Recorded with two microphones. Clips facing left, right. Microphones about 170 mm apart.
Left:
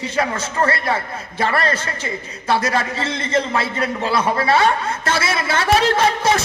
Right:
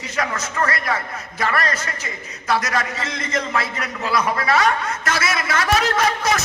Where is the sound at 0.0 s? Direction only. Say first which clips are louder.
Left 4 dB; 30° left (ahead or behind).